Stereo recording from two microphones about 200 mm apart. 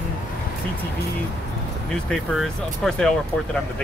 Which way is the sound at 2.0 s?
Centre (ahead or behind).